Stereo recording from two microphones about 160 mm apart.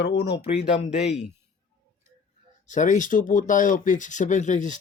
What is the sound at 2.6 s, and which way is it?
Speech, 50° left (ahead or behind).